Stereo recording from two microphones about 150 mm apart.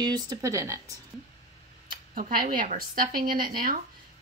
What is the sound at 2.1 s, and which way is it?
A woman's voice, 70° right (ahead or behind).